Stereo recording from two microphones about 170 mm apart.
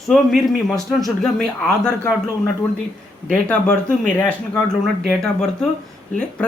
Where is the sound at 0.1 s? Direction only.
Centre (ahead or behind).